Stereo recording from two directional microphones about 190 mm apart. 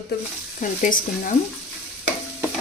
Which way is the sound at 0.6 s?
45° left (ahead or behind).